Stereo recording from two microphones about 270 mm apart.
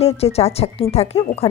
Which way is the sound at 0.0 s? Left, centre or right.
Left.